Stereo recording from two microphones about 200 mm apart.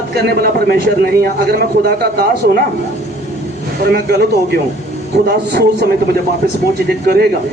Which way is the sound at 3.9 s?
55° right (ahead or behind).